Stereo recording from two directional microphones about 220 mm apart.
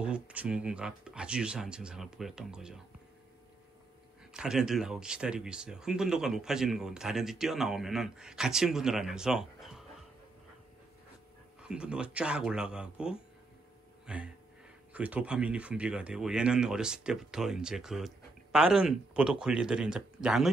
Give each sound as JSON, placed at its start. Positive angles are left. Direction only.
{"t": 0.0, "sound": "speech", "side_deg": -5}
{"t": 4.3, "sound": "speech", "side_deg": -5}
{"t": 11.6, "sound": "speech", "side_deg": -5}